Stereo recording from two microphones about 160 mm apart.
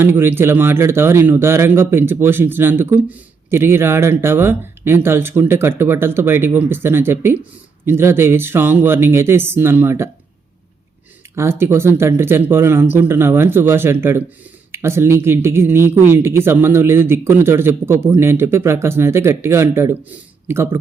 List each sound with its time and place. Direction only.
0.0 s speech: 15° right (ahead or behind)
11.3 s speech: 15° right (ahead or behind)